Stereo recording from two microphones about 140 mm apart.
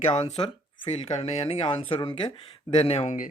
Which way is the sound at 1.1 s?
50° left (ahead or behind).